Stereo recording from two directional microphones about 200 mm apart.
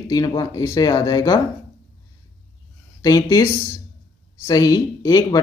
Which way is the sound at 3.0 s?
20° left (ahead or behind).